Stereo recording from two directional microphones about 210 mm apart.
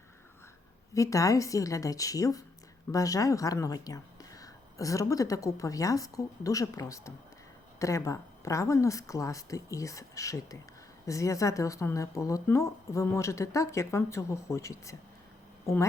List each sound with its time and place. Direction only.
0.9 s speech: 15° left (ahead or behind)